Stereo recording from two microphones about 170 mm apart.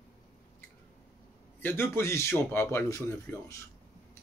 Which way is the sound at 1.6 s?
15° left (ahead or behind).